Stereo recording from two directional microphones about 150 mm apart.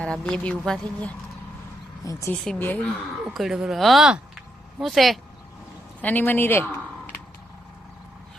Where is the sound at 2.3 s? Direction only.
5° left (ahead or behind).